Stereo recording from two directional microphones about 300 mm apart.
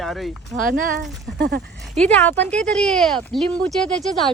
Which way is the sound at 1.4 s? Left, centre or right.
Right.